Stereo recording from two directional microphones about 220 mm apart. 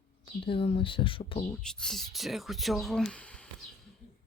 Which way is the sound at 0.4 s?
25° left (ahead or behind).